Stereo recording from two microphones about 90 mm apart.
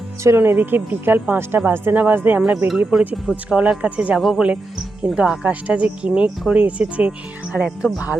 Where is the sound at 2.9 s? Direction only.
5° right (ahead or behind).